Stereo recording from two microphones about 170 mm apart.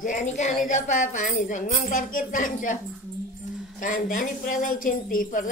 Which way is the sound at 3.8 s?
50° left (ahead or behind).